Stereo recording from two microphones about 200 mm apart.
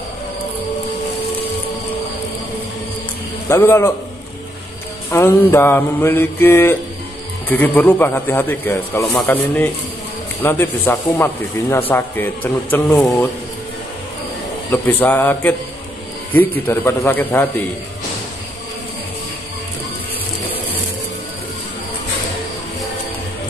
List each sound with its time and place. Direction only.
3.4 s a man's voice: 10° left (ahead or behind)
5.1 s a man's voice: 10° left (ahead or behind)
14.7 s a man's voice: 10° left (ahead or behind)